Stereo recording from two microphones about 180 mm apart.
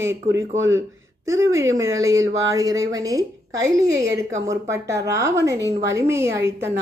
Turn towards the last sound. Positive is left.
turn(degrees=-15)  # may be behind; listen again after turning